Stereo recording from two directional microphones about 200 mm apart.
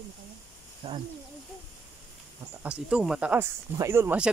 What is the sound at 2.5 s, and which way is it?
Speech, 5° right (ahead or behind).